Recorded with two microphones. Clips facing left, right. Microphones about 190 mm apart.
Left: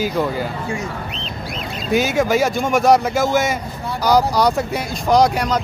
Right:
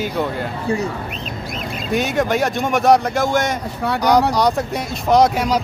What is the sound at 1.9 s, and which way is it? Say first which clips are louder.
Speech: left 2 dB; centre (ahead or behind).